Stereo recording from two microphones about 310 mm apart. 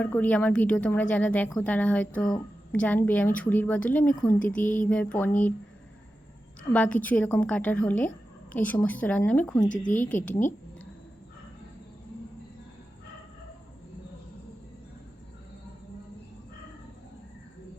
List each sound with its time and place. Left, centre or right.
0.0 s a woman's voice: centre
6.7 s a woman's voice: centre
9.8 s speech: left